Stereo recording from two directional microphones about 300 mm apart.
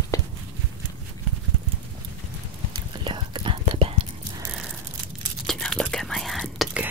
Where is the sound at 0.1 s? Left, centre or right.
Centre.